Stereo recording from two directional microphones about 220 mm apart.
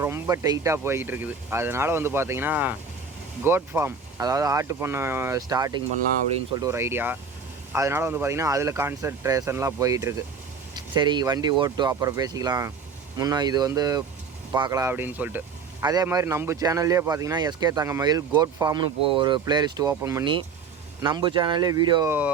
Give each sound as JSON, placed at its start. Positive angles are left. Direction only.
{"t": 0.0, "sound": "speech", "side_deg": -10}